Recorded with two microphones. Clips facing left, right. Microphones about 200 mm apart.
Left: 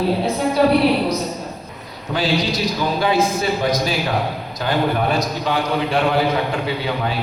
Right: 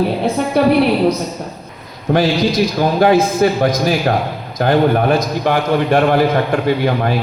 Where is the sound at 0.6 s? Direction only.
60° right (ahead or behind).